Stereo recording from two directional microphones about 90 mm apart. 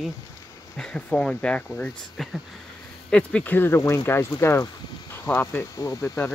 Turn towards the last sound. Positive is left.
turn(degrees=25)  # may be behind; listen again after turning